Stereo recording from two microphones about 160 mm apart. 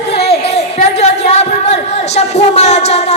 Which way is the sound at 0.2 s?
40° left (ahead or behind).